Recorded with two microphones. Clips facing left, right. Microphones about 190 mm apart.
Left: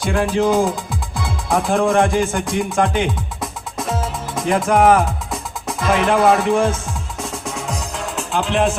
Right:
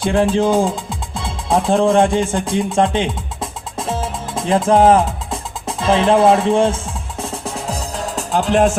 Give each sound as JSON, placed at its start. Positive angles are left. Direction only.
{"t": 0.0, "sound": "music", "side_deg": -25}